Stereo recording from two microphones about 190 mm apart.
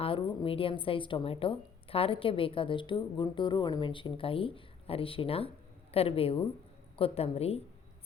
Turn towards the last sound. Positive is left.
turn(degrees=30)  # may be behind; listen again after turning